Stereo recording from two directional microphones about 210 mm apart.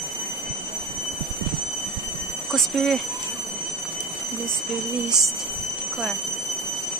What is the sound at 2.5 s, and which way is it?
Speech, centre (ahead or behind).